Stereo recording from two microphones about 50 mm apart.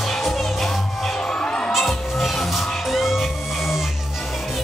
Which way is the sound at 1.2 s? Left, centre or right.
Centre.